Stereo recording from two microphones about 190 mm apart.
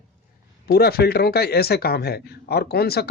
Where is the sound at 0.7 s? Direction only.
55° left (ahead or behind).